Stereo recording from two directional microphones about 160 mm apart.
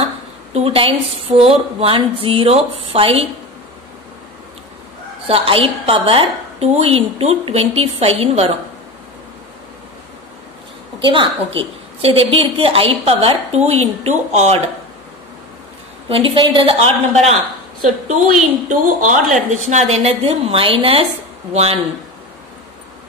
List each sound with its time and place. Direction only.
0.5 s a woman's voice: 40° right (ahead or behind)
5.2 s a woman's voice: 35° right (ahead or behind)
11.1 s a woman's voice: 30° right (ahead or behind)
16.1 s a woman's voice: 30° right (ahead or behind)
17.8 s a woman's voice: 50° right (ahead or behind)